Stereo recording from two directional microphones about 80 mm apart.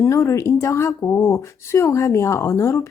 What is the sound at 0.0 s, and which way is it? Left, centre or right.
Speech, left.